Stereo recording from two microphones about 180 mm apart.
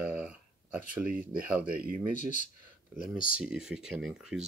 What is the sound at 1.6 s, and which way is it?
Speech, 55° right (ahead or behind).